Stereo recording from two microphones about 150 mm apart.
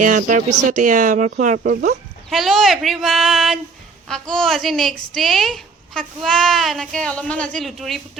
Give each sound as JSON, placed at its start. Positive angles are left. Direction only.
{"t": 0.0, "sound": "speech", "side_deg": -55}
{"t": 2.3, "sound": "speech", "side_deg": 0}